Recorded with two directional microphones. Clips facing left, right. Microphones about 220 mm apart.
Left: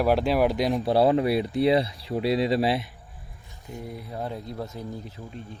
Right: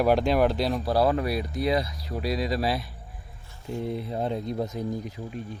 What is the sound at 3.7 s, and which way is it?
Speech, 25° right (ahead or behind).